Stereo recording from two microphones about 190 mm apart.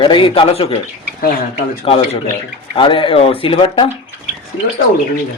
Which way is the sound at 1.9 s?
30° left (ahead or behind).